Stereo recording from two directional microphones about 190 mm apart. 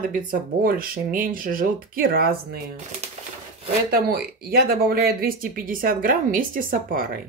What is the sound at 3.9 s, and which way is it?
Speech, 55° right (ahead or behind).